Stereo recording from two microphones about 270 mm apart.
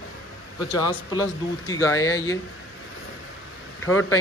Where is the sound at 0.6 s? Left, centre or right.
Centre.